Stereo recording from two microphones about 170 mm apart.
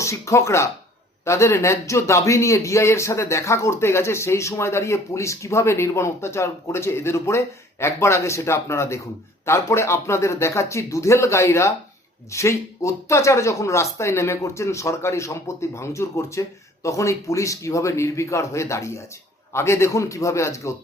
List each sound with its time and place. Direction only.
0.0 s a man's voice: 15° left (ahead or behind)